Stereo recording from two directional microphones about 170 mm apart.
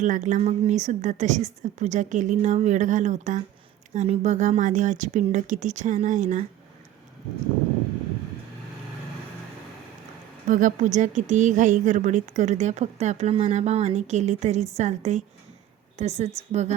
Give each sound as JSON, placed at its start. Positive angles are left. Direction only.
{"t": 0.0, "sound": "a woman's voice", "side_deg": -45}
{"t": 10.5, "sound": "a woman's voice", "side_deg": -50}